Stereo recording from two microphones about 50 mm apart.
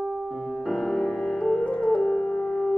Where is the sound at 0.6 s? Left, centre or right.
Centre.